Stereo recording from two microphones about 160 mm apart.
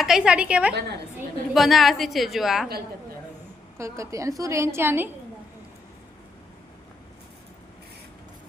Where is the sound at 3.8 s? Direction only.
20° right (ahead or behind).